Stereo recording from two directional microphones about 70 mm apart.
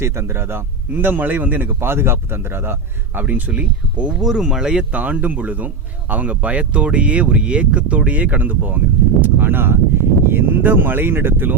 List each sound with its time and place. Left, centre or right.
0.0 s a man's voice: right; by 4.1 s centre
4.2 s speech: centre; by 11.5 s right